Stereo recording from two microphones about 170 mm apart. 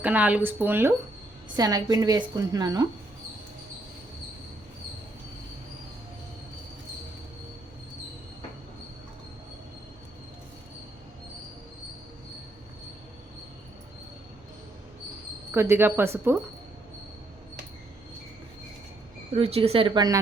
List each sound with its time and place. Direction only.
0.0 s a woman's voice: 10° right (ahead or behind)
15.5 s speech: 15° right (ahead or behind)
19.3 s a woman's voice: 35° right (ahead or behind)